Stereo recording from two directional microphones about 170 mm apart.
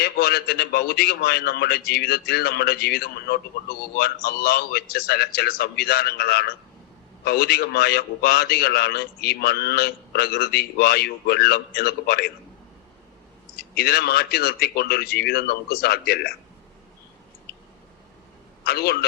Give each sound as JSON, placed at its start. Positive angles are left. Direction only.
{"t": 0.0, "sound": "a man's voice", "side_deg": 70}
{"t": 13.7, "sound": "a man's voice", "side_deg": 70}
{"t": 18.6, "sound": "a man's voice", "side_deg": 65}